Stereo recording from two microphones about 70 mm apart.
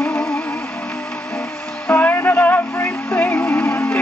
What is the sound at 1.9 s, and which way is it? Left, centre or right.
Music, left.